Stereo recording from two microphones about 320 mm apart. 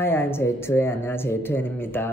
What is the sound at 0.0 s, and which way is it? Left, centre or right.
Speech, centre.